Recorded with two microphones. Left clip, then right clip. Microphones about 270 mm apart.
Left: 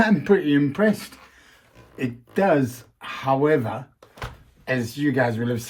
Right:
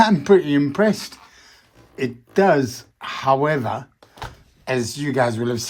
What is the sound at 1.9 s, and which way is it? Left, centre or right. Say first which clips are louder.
Speech: right 5 dB; right.